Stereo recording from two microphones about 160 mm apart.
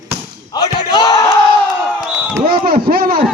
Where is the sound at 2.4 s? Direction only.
65° right (ahead or behind).